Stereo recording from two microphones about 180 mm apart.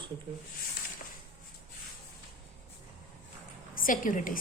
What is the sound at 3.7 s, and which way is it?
Speech, 50° left (ahead or behind).